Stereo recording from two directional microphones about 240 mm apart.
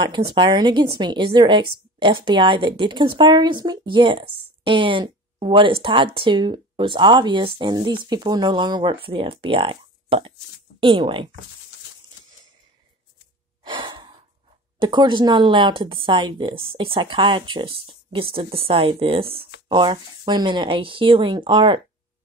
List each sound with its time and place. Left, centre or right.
0.0 s a woman's voice: centre
13.7 s gasp: centre
14.8 s a woman's voice: centre